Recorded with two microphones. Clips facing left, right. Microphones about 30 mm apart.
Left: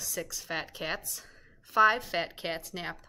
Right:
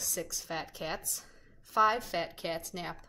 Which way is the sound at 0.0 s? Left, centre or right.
Centre.